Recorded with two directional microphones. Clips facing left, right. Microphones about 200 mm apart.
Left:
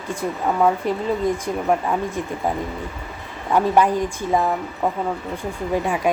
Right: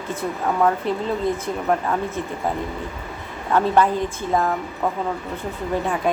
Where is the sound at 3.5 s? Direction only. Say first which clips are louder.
Left 1 dB; 15° left (ahead or behind).